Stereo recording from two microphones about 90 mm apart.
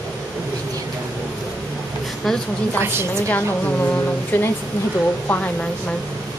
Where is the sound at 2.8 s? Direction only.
30° right (ahead or behind).